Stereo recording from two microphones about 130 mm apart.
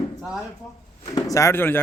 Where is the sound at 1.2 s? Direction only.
25° left (ahead or behind).